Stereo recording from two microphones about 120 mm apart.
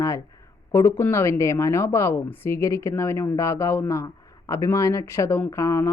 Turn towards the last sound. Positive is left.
turn(degrees=20)  # may be behind; listen again after turning